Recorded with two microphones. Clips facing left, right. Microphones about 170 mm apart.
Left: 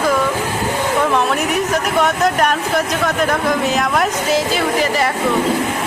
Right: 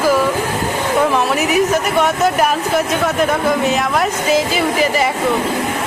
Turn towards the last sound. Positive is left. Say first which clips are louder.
# right 1 dB
turn(degrees=0)  # may be behind; listen again after turning